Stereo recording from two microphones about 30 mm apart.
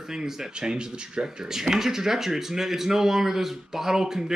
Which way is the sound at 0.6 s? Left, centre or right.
Right.